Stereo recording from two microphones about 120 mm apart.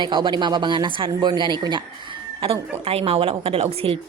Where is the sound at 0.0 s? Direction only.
40° right (ahead or behind).